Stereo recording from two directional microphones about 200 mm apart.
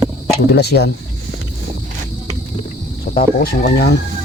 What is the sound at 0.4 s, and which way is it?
Speech, 55° left (ahead or behind).